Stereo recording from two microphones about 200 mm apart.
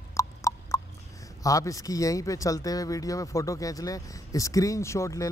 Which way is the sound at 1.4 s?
15° left (ahead or behind).